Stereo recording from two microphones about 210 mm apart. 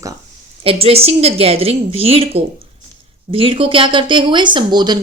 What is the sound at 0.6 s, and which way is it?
A woman's voice, 25° right (ahead or behind).